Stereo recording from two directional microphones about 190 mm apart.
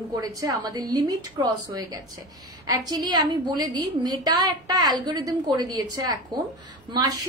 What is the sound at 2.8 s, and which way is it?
A woman's voice, 20° right (ahead or behind).